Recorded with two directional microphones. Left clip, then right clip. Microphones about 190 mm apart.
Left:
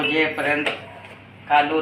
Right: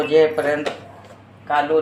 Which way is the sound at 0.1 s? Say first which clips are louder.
Right 5 dB; 65° right (ahead or behind).